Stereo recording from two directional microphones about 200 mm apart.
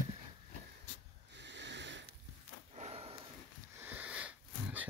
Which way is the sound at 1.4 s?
60° right (ahead or behind).